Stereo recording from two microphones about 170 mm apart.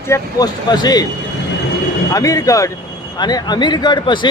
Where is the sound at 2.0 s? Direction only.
20° left (ahead or behind).